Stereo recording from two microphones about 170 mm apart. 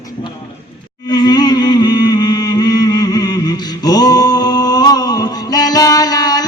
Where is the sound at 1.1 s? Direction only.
25° left (ahead or behind).